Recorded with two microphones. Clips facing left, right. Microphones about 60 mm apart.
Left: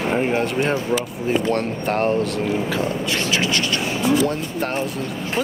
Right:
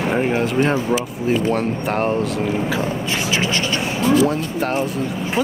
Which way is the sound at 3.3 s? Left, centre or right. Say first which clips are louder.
Right 2 dB; right.